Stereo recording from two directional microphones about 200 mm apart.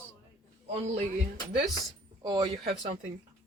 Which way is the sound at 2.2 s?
20° right (ahead or behind).